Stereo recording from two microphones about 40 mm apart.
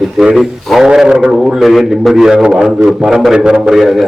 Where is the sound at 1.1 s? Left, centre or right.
Centre.